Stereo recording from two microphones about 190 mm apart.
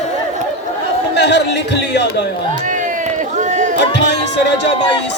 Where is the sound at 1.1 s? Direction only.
65° left (ahead or behind).